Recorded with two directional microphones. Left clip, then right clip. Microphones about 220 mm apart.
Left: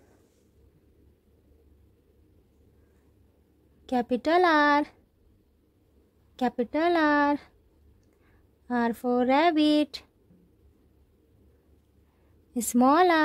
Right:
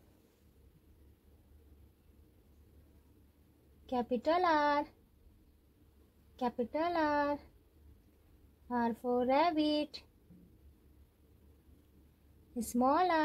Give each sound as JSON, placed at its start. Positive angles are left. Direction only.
{"t": 3.8, "sound": "speech", "side_deg": 45}
{"t": 6.3, "sound": "speech", "side_deg": 45}
{"t": 8.6, "sound": "speech", "side_deg": 45}
{"t": 12.5, "sound": "speech", "side_deg": 45}